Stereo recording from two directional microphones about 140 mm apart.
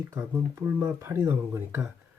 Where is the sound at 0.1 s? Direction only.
20° right (ahead or behind).